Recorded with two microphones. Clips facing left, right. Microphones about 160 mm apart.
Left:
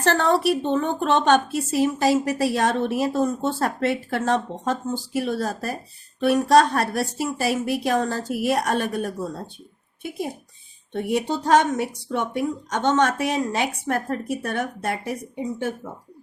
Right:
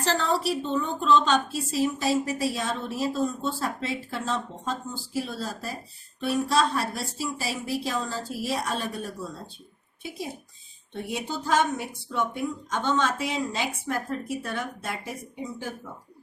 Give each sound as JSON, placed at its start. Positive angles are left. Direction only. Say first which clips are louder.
{"t": 0.0, "sound": "a woman's voice", "louder": "left 6 dB", "side_deg": 65}
{"t": 10.9, "sound": "a woman's voice", "louder": "left 8 dB", "side_deg": 65}